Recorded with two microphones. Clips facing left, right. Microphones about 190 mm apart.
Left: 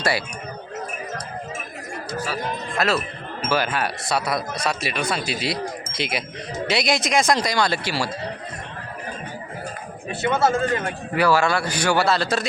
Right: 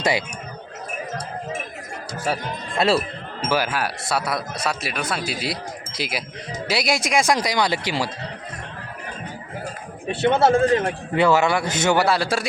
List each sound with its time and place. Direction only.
2.2 s a man's voice: 30° right (ahead or behind)
3.5 s speech: 5° right (ahead or behind)
10.2 s a man's voice: 30° right (ahead or behind); by 12.5 s 10° right (ahead or behind)